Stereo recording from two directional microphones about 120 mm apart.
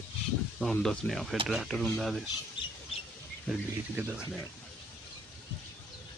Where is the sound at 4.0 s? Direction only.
15° right (ahead or behind).